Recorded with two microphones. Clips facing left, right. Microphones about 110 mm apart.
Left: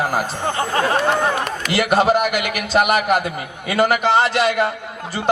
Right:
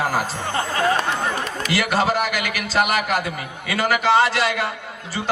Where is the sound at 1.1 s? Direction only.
55° left (ahead or behind).